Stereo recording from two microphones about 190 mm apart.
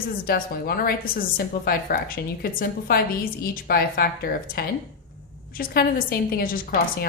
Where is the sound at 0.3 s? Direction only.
50° left (ahead or behind).